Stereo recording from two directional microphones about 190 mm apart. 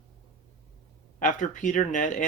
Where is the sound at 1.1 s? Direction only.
40° left (ahead or behind).